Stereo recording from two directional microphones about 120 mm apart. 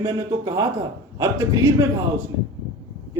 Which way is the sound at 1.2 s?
25° right (ahead or behind).